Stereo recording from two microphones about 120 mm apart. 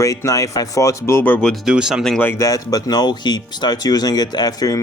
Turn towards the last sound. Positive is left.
turn(degrees=30)  # may be behind; listen again after turning